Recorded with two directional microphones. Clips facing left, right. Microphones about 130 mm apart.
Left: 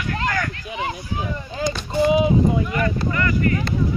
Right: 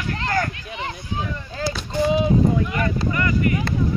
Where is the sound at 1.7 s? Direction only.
10° left (ahead or behind).